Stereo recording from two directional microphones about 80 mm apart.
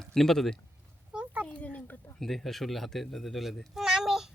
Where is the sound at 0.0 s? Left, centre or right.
Centre.